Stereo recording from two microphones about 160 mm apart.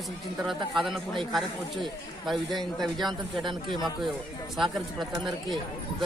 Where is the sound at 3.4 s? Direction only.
30° right (ahead or behind).